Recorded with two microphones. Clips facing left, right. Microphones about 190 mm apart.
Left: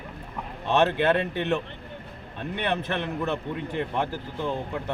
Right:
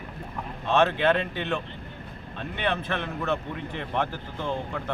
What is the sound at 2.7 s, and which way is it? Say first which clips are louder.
Speech: left 2 dB; 15° left (ahead or behind).